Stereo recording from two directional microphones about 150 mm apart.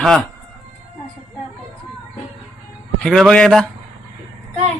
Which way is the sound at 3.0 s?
5° left (ahead or behind).